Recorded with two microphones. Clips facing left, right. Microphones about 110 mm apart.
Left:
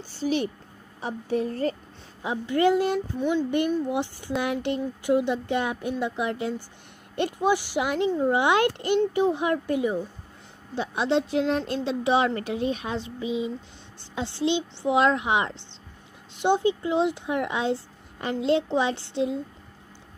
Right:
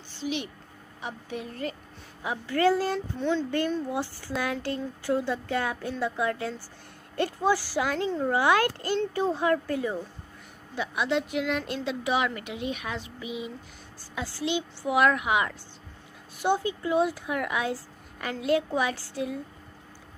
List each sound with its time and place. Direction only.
0.1 s speech: 40° left (ahead or behind)
2.2 s speech: 20° left (ahead or behind)
10.7 s speech: 30° left (ahead or behind)